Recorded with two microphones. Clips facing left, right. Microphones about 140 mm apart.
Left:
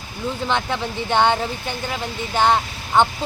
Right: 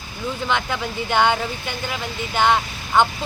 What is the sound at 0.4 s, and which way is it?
Speech, 30° left (ahead or behind).